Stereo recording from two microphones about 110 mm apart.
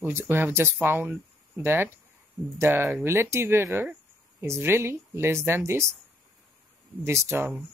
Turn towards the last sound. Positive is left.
turn(degrees=-25)  # may be behind; listen again after turning